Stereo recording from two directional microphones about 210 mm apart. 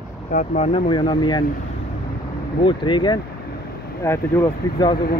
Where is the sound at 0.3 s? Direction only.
35° left (ahead or behind).